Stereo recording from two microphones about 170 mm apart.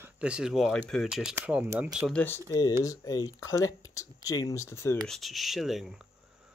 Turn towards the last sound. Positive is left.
turn(degrees=0)  # may be behind; listen again after turning